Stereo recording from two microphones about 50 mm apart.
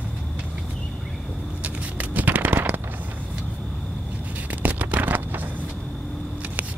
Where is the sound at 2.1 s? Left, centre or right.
Right.